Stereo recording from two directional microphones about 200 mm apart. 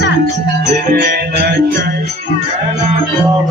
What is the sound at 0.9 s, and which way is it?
Music, 50° right (ahead or behind).